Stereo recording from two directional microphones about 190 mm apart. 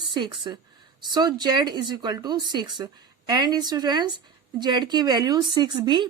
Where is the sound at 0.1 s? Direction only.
25° right (ahead or behind).